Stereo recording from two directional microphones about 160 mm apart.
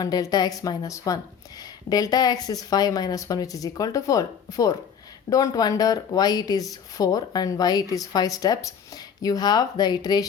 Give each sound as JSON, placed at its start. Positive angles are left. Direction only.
{"t": 0.0, "sound": "speech", "side_deg": 25}